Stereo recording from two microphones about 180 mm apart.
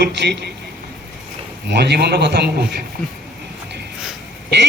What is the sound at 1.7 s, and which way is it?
Speech, 65° right (ahead or behind).